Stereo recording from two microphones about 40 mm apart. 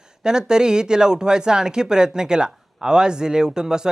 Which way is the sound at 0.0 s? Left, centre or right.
Centre.